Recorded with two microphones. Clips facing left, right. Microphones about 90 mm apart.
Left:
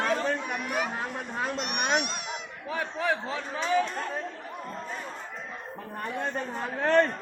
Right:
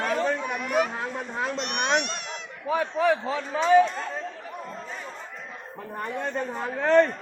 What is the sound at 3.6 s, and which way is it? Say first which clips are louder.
Speech: right 8 dB; 45° right (ahead or behind).